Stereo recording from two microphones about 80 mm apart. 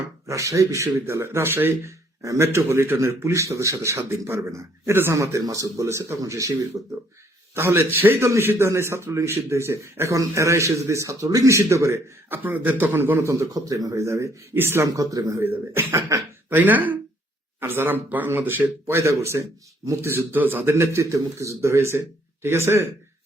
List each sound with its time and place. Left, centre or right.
0.3 s speech: right
7.5 s speech: right
12.3 s speech: right
14.5 s speech: right
14.8 s speech: right
15.4 s speech: right
16.5 s speech: right
18.9 s speech: right